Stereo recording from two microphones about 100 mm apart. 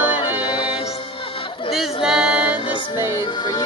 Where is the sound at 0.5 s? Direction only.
65° left (ahead or behind).